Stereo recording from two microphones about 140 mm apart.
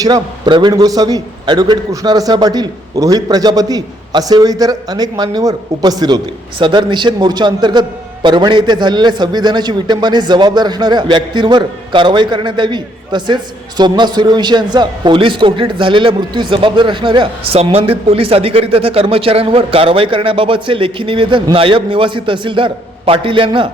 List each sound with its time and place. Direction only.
0.0 s a man's voice: 30° right (ahead or behind)